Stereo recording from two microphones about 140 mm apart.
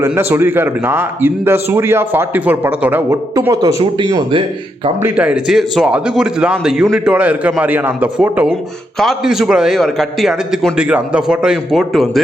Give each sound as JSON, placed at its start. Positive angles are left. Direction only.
{"t": 0.0, "sound": "a man's voice", "side_deg": -15}
{"t": 3.3, "sound": "a man's voice", "side_deg": -25}
{"t": 5.0, "sound": "a man's voice", "side_deg": -10}